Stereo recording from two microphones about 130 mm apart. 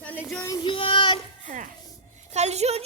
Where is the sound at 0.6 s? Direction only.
40° left (ahead or behind).